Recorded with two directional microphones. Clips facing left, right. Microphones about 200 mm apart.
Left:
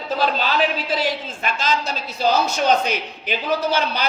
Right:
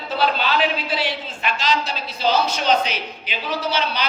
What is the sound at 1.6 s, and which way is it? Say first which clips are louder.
A man's voice: even; 50° left (ahead or behind).